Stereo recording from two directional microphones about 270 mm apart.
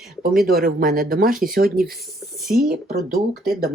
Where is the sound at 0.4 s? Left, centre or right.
Right.